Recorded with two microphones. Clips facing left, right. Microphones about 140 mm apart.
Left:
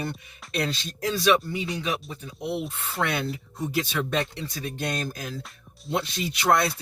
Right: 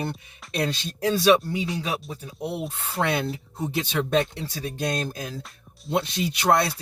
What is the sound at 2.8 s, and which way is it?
Speech, 30° right (ahead or behind).